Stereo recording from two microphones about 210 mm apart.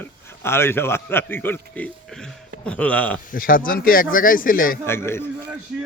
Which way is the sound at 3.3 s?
40° left (ahead or behind).